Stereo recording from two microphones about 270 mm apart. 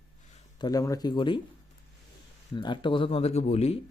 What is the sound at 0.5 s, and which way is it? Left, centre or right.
Speech, centre.